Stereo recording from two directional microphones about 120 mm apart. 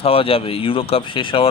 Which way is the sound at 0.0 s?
50° left (ahead or behind).